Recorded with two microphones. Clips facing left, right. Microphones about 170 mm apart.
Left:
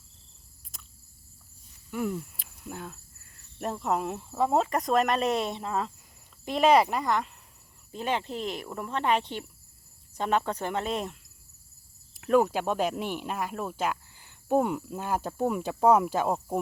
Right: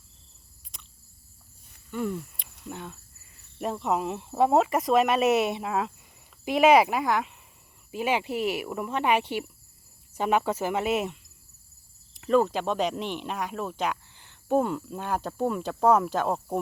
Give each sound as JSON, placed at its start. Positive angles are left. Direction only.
{"t": 0.7, "sound": "cricket", "side_deg": 5}
{"t": 1.9, "sound": "speech", "side_deg": 5}
{"t": 4.2, "sound": "speech", "side_deg": -20}
{"t": 4.5, "sound": "speech", "side_deg": -5}
{"t": 12.1, "sound": "speech", "side_deg": 5}